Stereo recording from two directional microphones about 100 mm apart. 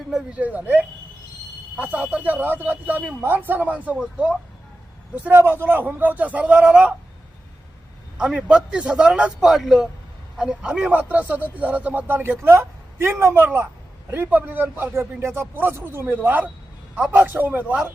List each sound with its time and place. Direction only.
0.1 s a man's voice: 10° right (ahead or behind)
8.2 s a man's voice: 10° right (ahead or behind)